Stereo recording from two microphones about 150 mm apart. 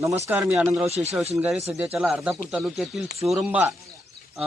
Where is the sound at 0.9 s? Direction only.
45° right (ahead or behind).